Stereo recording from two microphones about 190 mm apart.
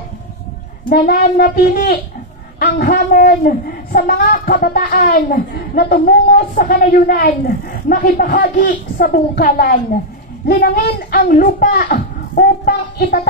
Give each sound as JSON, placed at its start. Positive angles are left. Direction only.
{"t": 0.8, "sound": "a woman's voice", "side_deg": 55}